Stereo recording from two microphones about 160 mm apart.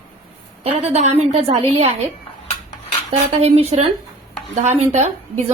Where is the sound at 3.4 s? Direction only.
40° right (ahead or behind).